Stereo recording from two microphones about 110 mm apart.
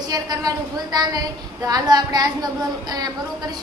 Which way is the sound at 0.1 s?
35° right (ahead or behind).